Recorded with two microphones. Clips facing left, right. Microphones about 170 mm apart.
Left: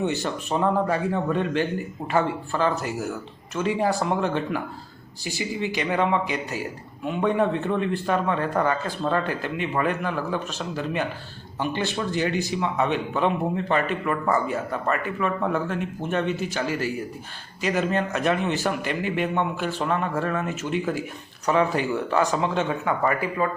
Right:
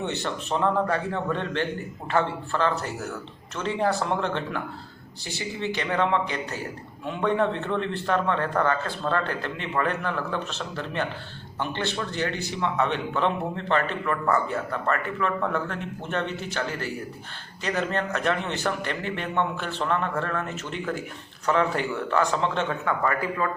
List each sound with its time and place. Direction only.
0.2 s a man's voice: 10° left (ahead or behind)